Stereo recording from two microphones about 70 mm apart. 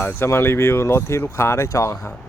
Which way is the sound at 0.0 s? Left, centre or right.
Left.